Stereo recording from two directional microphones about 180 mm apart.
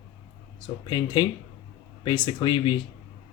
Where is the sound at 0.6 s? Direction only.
25° left (ahead or behind).